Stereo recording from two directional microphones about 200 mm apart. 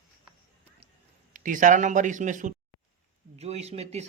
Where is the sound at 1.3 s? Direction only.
40° right (ahead or behind).